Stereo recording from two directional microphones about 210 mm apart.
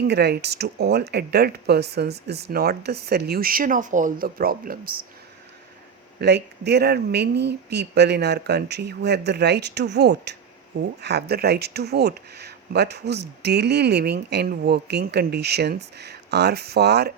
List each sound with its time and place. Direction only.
0.1 s speech: 50° right (ahead or behind)
6.1 s speech: 55° right (ahead or behind)